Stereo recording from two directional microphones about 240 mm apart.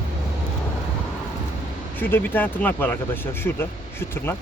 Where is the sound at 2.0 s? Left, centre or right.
Centre.